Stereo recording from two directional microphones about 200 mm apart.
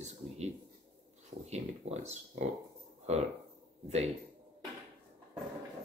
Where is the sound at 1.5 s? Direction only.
35° right (ahead or behind).